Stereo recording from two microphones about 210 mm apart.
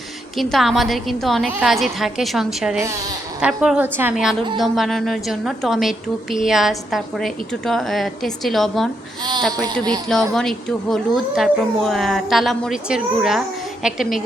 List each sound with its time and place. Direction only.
0.3 s a woman's voice: centre (ahead or behind)
10.3 s a woman's voice: centre (ahead or behind)